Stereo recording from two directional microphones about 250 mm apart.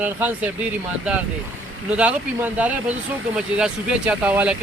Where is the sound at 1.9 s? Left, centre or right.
Centre.